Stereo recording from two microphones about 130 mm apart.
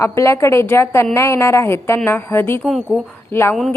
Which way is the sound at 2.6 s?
Centre (ahead or behind).